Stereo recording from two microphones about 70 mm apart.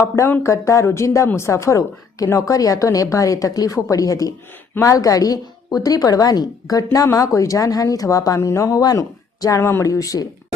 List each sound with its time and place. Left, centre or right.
0.4 s a woman's voice: left
8.4 s a woman's voice: left